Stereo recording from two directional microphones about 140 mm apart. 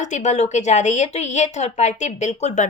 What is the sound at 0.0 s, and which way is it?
A woman's voice, 60° left (ahead or behind).